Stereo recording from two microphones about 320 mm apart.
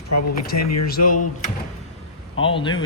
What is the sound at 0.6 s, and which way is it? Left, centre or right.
Speech, left.